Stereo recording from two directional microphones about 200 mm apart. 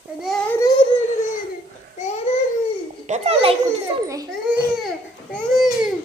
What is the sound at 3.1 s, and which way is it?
Speech, 30° right (ahead or behind).